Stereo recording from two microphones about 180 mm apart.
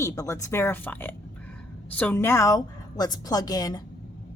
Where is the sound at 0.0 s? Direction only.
15° left (ahead or behind).